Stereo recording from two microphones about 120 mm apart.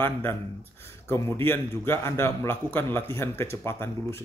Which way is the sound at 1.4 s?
20° left (ahead or behind).